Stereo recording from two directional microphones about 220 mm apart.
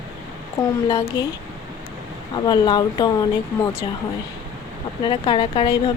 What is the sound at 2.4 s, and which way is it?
Speech, 20° left (ahead or behind).